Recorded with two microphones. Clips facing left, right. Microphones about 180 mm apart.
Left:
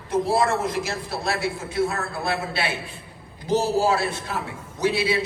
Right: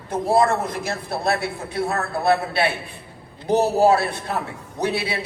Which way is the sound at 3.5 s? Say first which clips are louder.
Right 4 dB; 60° right (ahead or behind).